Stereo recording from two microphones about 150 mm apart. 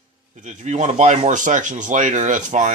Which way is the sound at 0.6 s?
50° right (ahead or behind).